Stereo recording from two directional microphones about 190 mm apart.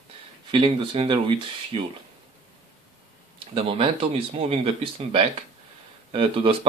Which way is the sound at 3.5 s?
30° right (ahead or behind).